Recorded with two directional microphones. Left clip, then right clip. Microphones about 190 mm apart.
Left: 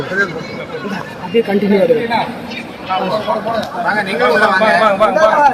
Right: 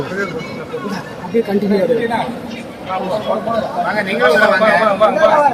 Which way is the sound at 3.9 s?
30° left (ahead or behind).